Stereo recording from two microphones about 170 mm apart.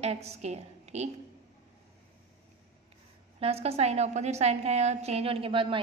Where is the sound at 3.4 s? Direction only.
35° right (ahead or behind).